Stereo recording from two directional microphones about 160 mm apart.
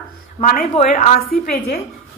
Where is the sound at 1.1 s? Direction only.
70° left (ahead or behind).